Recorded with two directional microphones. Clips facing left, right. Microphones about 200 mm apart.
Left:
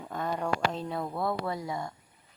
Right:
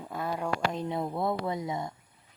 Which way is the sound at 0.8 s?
20° right (ahead or behind).